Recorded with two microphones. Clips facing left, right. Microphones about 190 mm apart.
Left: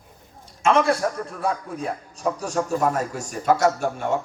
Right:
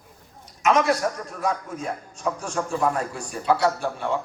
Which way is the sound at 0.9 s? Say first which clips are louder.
Left 1 dB; 30° left (ahead or behind).